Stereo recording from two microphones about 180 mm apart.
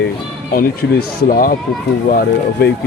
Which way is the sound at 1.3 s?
50° left (ahead or behind).